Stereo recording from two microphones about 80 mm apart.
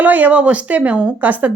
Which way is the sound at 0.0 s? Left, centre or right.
Right.